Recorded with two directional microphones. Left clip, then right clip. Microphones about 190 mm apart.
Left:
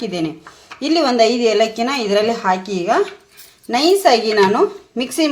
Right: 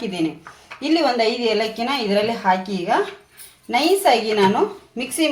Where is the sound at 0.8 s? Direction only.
50° left (ahead or behind).